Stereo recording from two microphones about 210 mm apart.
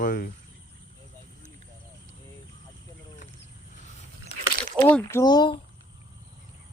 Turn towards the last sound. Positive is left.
turn(degrees=20)  # may be behind; listen again after turning